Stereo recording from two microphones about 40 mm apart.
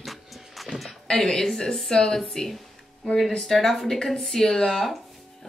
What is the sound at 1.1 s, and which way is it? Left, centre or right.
Speech, centre.